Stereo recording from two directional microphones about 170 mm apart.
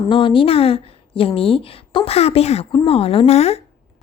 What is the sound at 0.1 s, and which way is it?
A woman's voice, 30° left (ahead or behind).